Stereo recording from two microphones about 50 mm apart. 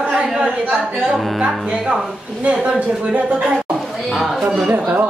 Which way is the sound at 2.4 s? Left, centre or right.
Right.